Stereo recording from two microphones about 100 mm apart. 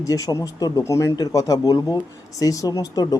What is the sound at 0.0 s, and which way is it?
Speech, 35° left (ahead or behind).